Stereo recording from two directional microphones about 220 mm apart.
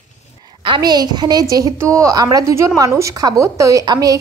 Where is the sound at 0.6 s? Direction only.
20° right (ahead or behind).